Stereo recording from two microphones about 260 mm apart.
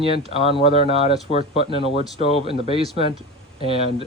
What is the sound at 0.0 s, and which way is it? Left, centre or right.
Speech, right.